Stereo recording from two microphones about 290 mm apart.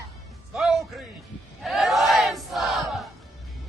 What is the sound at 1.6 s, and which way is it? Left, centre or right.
Battle cry, centre.